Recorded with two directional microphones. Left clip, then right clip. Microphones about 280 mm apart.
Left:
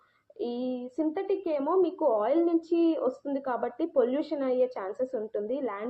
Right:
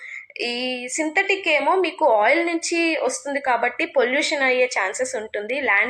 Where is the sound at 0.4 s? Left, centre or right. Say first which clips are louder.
Right 7 dB; right.